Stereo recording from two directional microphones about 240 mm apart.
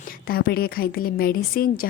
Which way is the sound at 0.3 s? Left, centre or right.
Left.